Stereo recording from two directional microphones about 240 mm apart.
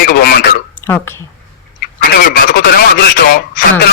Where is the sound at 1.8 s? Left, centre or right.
Left.